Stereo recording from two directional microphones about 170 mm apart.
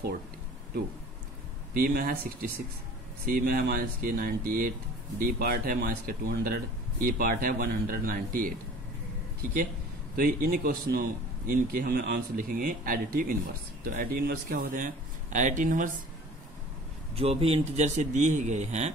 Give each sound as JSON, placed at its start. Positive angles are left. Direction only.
{"t": 1.7, "sound": "speech", "side_deg": -60}
{"t": 10.1, "sound": "speech", "side_deg": -60}
{"t": 17.1, "sound": "a man's voice", "side_deg": -35}